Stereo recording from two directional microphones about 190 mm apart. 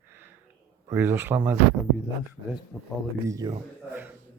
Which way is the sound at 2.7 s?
5° left (ahead or behind).